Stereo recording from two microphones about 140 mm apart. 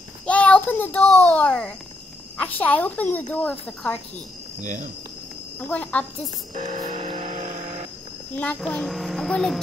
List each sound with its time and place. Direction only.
0.3 s a child's voice: 10° left (ahead or behind)
4.6 s speech: 65° right (ahead or behind)
5.7 s speech: 10° left (ahead or behind)
6.7 s vehicle: 45° right (ahead or behind)
8.5 s a child's voice: 5° left (ahead or behind)